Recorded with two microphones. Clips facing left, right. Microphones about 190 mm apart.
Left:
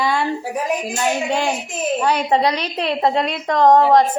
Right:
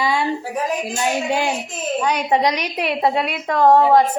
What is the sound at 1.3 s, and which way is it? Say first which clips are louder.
Speech: even; 5° right (ahead or behind).